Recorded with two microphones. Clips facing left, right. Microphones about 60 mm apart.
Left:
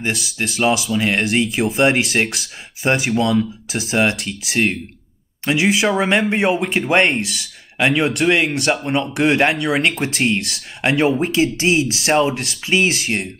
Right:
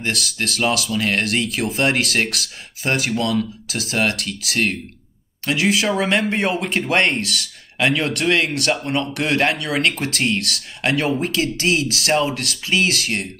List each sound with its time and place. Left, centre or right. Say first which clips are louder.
0.0 s speech: left 1 dB; centre
6.1 s speech: left 3 dB; centre